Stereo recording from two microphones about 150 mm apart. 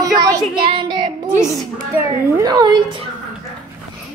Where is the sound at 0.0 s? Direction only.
25° right (ahead or behind).